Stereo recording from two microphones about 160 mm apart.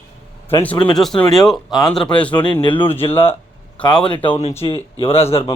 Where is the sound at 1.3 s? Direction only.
Centre (ahead or behind).